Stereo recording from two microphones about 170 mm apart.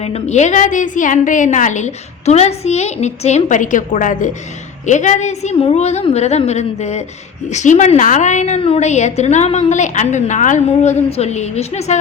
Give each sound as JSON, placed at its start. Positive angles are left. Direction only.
{"t": 0.0, "sound": "a woman's voice", "side_deg": 40}